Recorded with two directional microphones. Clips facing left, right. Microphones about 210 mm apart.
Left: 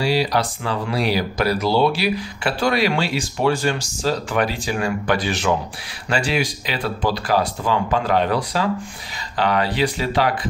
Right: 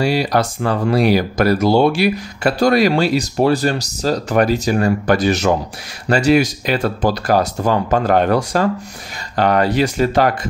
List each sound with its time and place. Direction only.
0.0 s speech: 50° right (ahead or behind)